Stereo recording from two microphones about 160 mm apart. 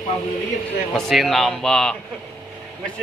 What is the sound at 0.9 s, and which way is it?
Speech, centre (ahead or behind).